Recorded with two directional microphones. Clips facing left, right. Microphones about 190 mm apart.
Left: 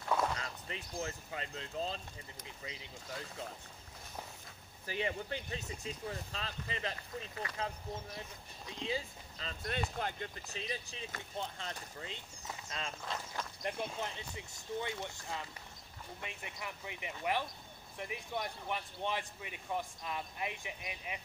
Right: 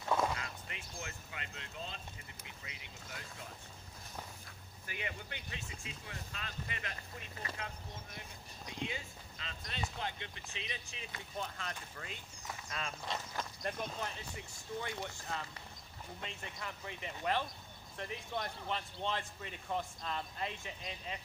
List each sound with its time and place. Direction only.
0.4 s speech: 35° left (ahead or behind)
4.8 s speech: 30° left (ahead or behind)
13.0 s speech: centre (ahead or behind)
13.6 s speech: 15° left (ahead or behind)